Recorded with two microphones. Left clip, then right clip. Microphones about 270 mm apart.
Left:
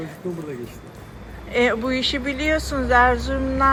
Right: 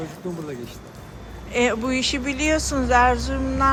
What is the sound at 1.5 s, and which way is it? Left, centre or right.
Speech, centre.